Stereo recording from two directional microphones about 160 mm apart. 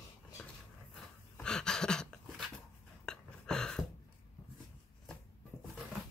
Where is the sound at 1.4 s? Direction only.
5° left (ahead or behind).